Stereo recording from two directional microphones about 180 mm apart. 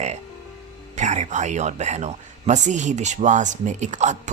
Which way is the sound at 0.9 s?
40° right (ahead or behind).